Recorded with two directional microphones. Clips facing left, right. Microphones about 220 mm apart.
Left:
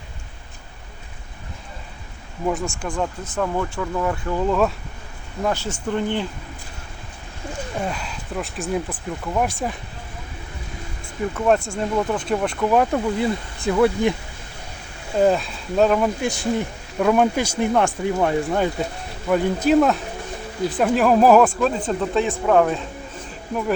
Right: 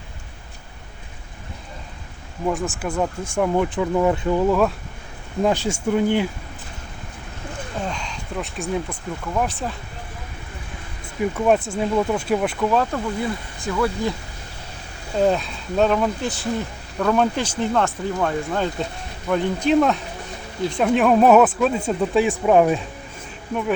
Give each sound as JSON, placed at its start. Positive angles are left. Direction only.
{"t": 2.5, "sound": "speech", "side_deg": 0}
{"t": 3.0, "sound": "speech", "side_deg": -15}
{"t": 5.4, "sound": "speech", "side_deg": -15}
{"t": 7.8, "sound": "speech", "side_deg": 5}
{"t": 11.3, "sound": "speech", "side_deg": -5}
{"t": 12.7, "sound": "speech", "side_deg": 15}
{"t": 15.2, "sound": "speech", "side_deg": 0}